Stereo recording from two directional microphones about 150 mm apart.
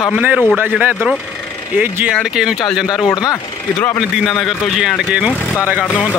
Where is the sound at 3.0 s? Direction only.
25° left (ahead or behind).